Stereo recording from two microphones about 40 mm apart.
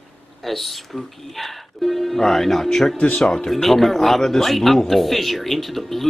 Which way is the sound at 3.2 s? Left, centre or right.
Centre.